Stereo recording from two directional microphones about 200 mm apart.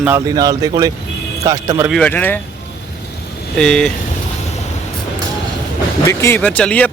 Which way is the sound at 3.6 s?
5° left (ahead or behind).